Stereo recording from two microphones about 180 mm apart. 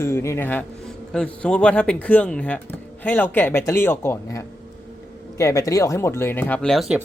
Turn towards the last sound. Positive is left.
turn(degrees=0)  # may be behind; listen again after turning